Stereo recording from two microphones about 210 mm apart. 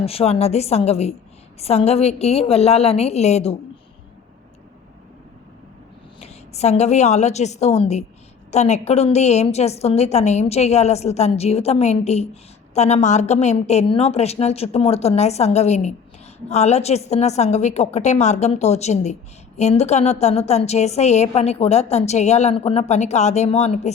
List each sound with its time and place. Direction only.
0.0 s a woman's voice: 30° left (ahead or behind)
6.1 s a woman's voice: 30° left (ahead or behind)